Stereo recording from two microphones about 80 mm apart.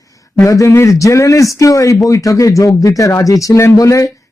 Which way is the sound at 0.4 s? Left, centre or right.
Left.